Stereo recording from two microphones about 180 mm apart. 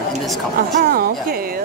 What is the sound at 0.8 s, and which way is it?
Speech, 55° right (ahead or behind).